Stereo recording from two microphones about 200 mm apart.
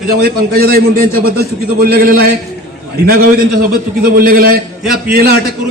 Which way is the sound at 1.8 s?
50° right (ahead or behind).